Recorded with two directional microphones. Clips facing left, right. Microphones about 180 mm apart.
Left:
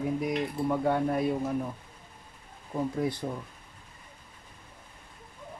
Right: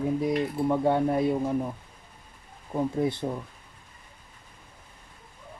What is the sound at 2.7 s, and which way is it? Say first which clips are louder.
Speech: right 3 dB; 25° right (ahead or behind).